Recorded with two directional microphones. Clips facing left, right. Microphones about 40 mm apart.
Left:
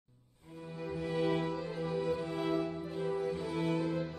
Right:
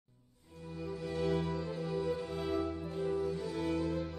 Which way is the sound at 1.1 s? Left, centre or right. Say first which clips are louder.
Left 2 dB; left.